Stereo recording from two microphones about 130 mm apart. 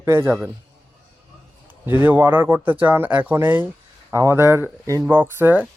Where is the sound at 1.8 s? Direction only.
15° right (ahead or behind).